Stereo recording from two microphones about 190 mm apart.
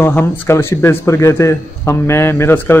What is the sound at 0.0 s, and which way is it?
Speech, 10° left (ahead or behind).